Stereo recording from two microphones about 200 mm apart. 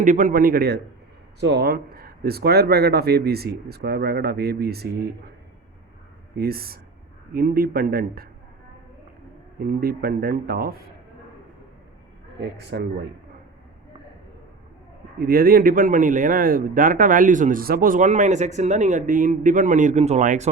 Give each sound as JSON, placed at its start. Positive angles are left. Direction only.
{"t": 0.0, "sound": "speech", "side_deg": -40}
{"t": 6.3, "sound": "speech", "side_deg": -50}
{"t": 9.6, "sound": "speech", "side_deg": -50}
{"t": 12.5, "sound": "a man's voice", "side_deg": -55}
{"t": 15.2, "sound": "a man's voice", "side_deg": -50}